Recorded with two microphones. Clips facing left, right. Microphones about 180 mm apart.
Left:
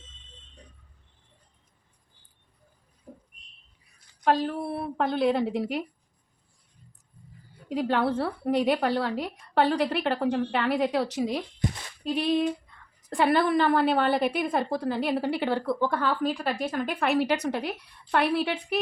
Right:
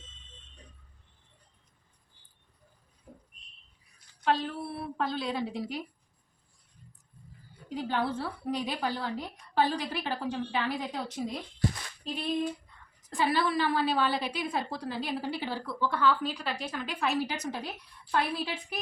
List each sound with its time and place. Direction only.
4.2 s a woman's voice: 50° left (ahead or behind)
7.7 s a woman's voice: 70° left (ahead or behind)
12.0 s female singing: 80° left
13.1 s a woman's voice: 60° left (ahead or behind)